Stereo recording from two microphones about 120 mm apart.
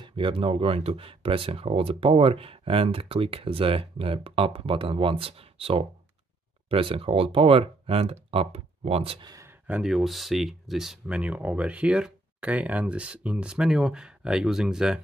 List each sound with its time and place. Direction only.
0.0 s speech: 45° right (ahead or behind)
9.2 s speech: 30° right (ahead or behind)
9.7 s speech: 5° right (ahead or behind)